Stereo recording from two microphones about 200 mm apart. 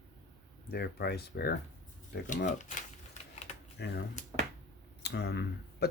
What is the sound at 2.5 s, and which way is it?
Speech, 35° left (ahead or behind).